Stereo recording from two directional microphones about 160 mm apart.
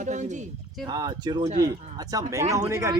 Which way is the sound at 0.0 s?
50° right (ahead or behind).